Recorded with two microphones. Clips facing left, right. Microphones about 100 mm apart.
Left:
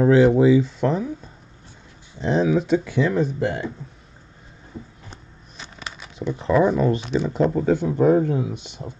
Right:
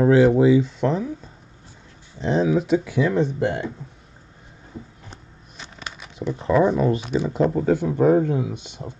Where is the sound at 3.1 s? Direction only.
20° right (ahead or behind).